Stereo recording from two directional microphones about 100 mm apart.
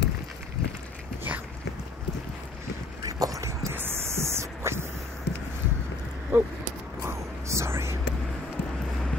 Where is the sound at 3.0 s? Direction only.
35° right (ahead or behind).